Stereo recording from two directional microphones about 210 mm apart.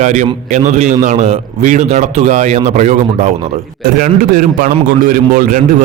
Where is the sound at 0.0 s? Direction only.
35° right (ahead or behind).